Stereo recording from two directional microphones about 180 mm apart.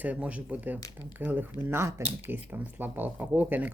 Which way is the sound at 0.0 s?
5° right (ahead or behind).